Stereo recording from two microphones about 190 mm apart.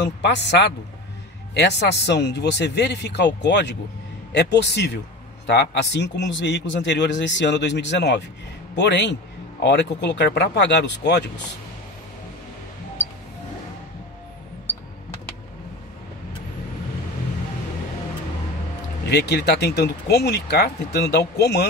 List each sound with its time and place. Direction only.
0.2 s a man's voice: 65° left (ahead or behind)
19.0 s speech: 60° left (ahead or behind)